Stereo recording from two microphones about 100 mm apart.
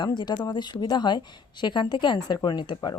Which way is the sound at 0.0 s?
50° left (ahead or behind).